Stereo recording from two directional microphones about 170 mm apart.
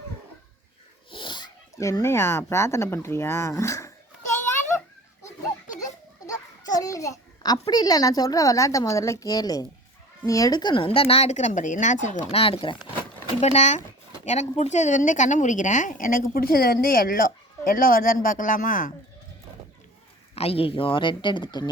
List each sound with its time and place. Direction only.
1.1 s speech: 30° left (ahead or behind)
5.8 s children playing: 20° left (ahead or behind)
7.7 s a woman's voice: 25° left (ahead or behind); by 18.9 s 50° left (ahead or behind)
20.3 s a woman's voice: 35° left (ahead or behind)